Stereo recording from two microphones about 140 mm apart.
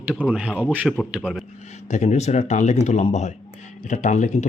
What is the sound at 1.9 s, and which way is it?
Speech, 55° left (ahead or behind).